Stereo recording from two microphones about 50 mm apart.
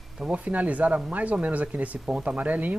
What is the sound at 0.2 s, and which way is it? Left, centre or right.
Speech, right.